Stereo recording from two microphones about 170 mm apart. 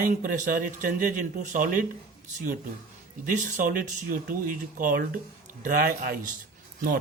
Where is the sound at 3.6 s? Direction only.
55° right (ahead or behind).